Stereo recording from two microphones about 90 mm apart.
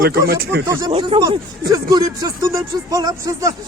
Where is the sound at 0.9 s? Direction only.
90° right.